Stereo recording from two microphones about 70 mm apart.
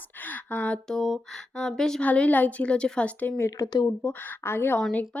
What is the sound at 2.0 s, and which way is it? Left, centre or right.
A woman's voice, centre.